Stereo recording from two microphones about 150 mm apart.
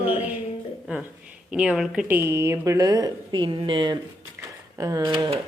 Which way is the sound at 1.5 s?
Centre (ahead or behind).